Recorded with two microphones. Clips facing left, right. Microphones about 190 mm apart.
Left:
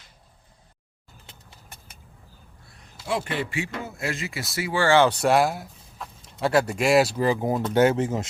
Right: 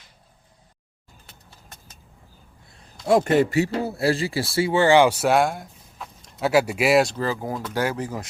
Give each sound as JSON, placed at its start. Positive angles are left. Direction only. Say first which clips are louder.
{"t": 1.3, "sound": "a sound", "louder": "even", "side_deg": 20}
{"t": 3.1, "sound": "speech", "louder": "right 10 dB", "side_deg": -45}
{"t": 7.2, "sound": "speech", "louder": "left 4 dB", "side_deg": 20}